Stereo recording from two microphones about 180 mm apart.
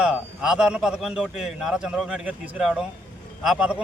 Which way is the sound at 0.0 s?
5° right (ahead or behind).